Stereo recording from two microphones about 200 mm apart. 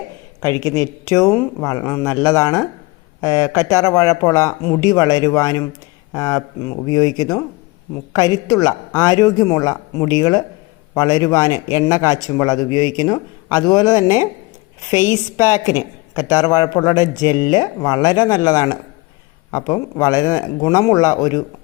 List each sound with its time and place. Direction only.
0.6 s a man's voice: 15° left (ahead or behind)
15.1 s a woman's voice: 10° right (ahead or behind)
16.1 s a man's voice: 20° left (ahead or behind)